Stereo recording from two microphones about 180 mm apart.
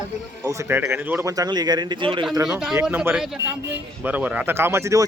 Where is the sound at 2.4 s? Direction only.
5° right (ahead or behind).